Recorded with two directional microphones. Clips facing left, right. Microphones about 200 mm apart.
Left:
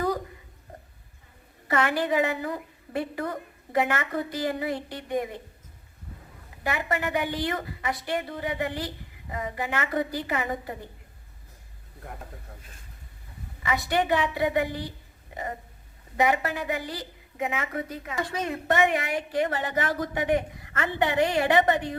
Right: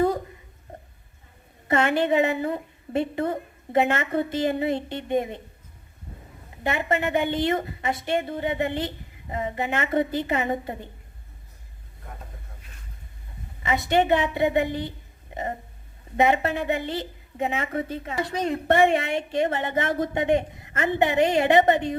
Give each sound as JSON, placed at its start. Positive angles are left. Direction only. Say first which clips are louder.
{"t": 0.7, "sound": "a sound", "louder": "right 3 dB", "side_deg": -25}
{"t": 1.6, "sound": "a woman's voice", "louder": "right 4 dB", "side_deg": -25}
{"t": 6.6, "sound": "a woman's voice", "louder": "right 4 dB", "side_deg": -25}
{"t": 13.6, "sound": "a woman's voice", "louder": "right 4 dB", "side_deg": -20}